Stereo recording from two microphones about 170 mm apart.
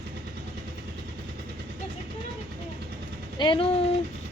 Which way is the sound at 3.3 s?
30° left (ahead or behind).